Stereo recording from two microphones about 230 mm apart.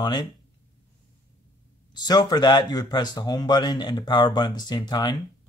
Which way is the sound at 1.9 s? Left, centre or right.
Centre.